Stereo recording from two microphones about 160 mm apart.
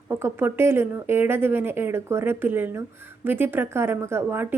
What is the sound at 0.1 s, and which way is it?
A woman's voice, 15° right (ahead or behind).